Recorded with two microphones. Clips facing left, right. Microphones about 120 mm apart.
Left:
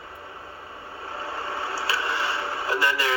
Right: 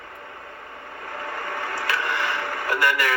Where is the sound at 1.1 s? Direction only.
30° left (ahead or behind).